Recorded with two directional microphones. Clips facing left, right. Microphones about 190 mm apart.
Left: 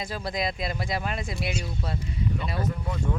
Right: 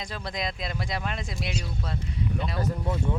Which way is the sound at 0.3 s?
5° left (ahead or behind).